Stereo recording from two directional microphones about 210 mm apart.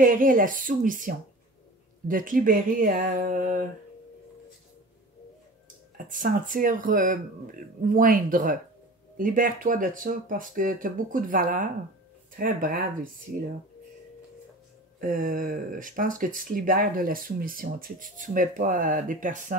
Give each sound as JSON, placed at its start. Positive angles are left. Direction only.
{"t": 0.0, "sound": "speech", "side_deg": -40}
{"t": 5.9, "sound": "speech", "side_deg": -40}
{"t": 15.0, "sound": "speech", "side_deg": -40}